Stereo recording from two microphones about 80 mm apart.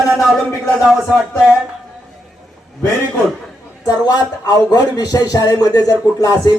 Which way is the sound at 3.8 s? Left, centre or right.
Left.